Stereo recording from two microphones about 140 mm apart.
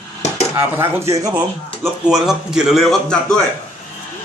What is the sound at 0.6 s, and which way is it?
Speech, 15° right (ahead or behind).